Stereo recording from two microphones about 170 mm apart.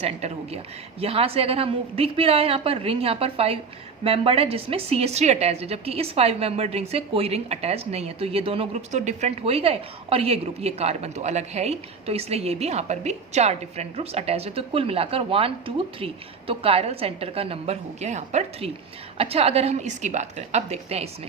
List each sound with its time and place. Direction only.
0.0 s a woman's voice: 40° right (ahead or behind)